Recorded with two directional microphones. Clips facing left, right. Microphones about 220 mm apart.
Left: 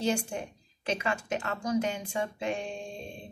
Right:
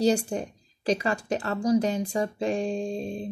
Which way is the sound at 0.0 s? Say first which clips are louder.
Right 7 dB; 35° right (ahead or behind).